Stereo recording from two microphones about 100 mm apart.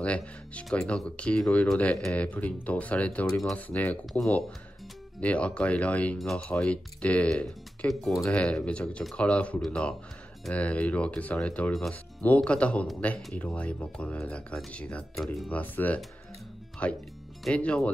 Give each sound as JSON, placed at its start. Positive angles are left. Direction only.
{"t": 0.0, "sound": "speech", "side_deg": 15}
{"t": 5.2, "sound": "speech", "side_deg": 15}